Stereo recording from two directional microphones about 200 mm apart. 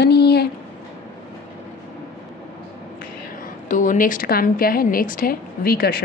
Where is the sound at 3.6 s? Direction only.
40° left (ahead or behind).